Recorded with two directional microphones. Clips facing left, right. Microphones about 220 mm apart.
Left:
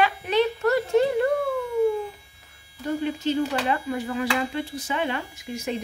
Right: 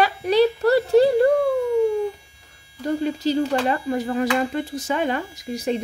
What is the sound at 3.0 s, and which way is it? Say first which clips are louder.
Speech: right 2 dB; 35° right (ahead or behind).